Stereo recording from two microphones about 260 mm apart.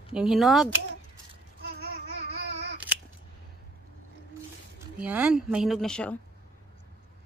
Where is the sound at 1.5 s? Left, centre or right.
Right.